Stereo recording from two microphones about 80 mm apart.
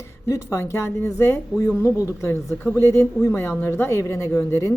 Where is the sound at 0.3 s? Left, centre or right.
Left.